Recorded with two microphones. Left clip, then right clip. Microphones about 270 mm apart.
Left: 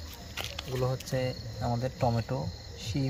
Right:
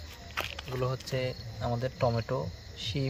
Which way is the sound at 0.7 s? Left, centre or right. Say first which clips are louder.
Left 1 dB; centre.